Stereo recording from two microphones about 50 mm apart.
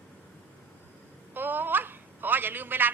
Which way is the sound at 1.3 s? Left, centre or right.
Right.